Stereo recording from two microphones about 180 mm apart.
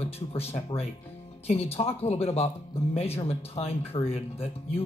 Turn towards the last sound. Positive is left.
turn(degrees=30)  # may be behind; listen again after turning